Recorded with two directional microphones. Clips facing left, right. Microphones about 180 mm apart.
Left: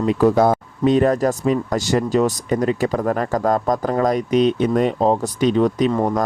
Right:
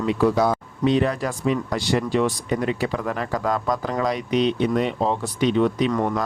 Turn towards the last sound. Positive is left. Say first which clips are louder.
# left 3 dB
turn(degrees=35)  # may be behind; listen again after turning